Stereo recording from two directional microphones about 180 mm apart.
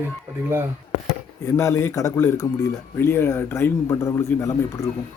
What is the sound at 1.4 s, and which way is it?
Speech, 15° left (ahead or behind).